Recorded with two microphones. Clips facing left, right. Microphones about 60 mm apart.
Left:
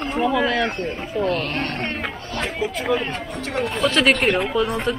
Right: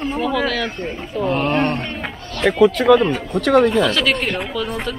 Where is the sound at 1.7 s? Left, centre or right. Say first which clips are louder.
Even; left.